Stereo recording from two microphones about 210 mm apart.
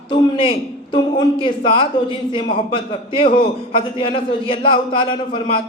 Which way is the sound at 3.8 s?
25° left (ahead or behind).